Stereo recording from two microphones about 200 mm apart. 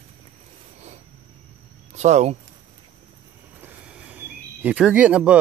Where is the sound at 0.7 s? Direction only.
35° right (ahead or behind).